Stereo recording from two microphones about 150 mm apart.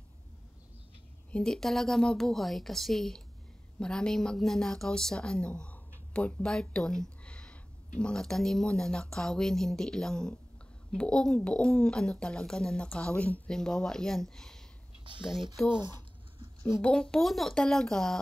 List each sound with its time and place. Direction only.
1.3 s speech: 5° left (ahead or behind)
15.1 s speech: 35° right (ahead or behind)
16.3 s a sound: 30° right (ahead or behind)
16.8 s speech: 5° left (ahead or behind)